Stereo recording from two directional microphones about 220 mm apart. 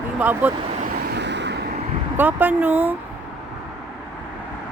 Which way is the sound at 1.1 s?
50° right (ahead or behind).